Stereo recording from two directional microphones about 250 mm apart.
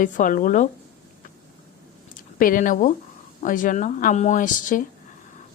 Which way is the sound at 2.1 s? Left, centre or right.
Left.